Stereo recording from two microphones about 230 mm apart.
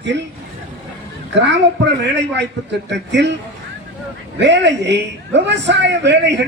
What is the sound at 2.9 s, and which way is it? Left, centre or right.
Speech, right.